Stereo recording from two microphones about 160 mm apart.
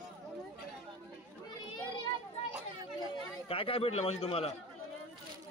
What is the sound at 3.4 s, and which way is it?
A man's voice, 35° left (ahead or behind).